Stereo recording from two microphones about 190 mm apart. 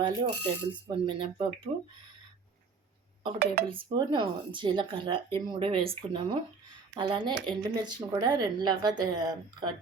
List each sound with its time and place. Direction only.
0.0 s speech: 25° right (ahead or behind)
3.3 s speech: 55° right (ahead or behind)
3.7 s speech: 25° right (ahead or behind)